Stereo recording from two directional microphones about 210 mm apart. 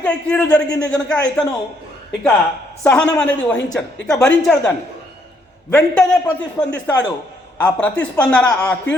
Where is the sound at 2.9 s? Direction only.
5° left (ahead or behind).